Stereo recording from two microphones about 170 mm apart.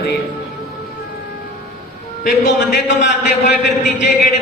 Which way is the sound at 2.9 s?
90° left.